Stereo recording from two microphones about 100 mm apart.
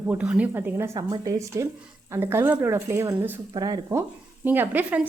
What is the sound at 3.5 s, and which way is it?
Speech, 45° right (ahead or behind).